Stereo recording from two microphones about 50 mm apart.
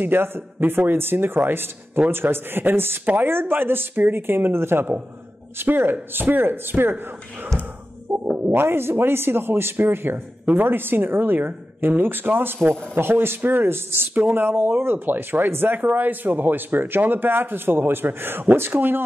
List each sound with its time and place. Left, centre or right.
0.0 s speech: right
8.1 s music: centre
8.5 s speech: right